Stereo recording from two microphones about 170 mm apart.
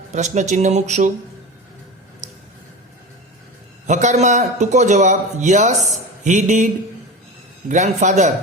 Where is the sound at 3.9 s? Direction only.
45° right (ahead or behind).